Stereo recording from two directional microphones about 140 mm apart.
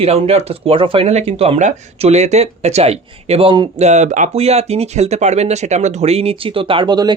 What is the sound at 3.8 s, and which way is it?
Speech, 55° right (ahead or behind).